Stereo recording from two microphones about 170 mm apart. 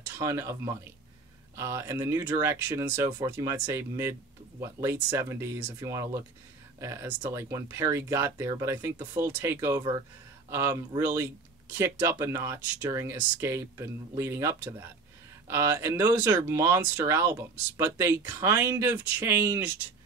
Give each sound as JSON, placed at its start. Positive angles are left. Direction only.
{"t": 0.2, "sound": "speech", "side_deg": -15}